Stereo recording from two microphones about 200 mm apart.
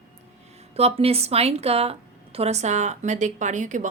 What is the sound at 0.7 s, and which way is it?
A woman's voice, 30° right (ahead or behind).